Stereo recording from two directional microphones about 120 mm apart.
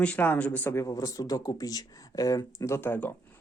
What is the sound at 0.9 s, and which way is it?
Speech, 30° left (ahead or behind).